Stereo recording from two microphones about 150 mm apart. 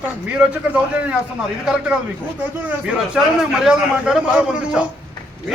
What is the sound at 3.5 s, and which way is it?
A man's voice, 5° right (ahead or behind).